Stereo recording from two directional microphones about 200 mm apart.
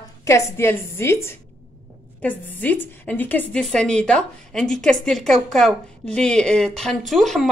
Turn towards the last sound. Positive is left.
turn(degrees=0)  # may be behind; listen again after turning